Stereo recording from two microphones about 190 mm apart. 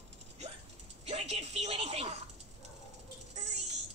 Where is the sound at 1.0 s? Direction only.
35° right (ahead or behind).